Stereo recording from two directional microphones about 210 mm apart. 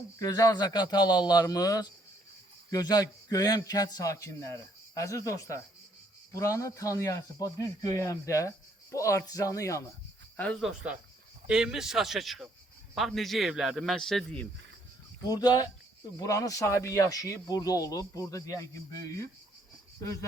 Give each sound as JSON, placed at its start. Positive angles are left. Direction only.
{"t": 0.2, "sound": "a man's voice", "side_deg": 15}
{"t": 15.3, "sound": "speech", "side_deg": 20}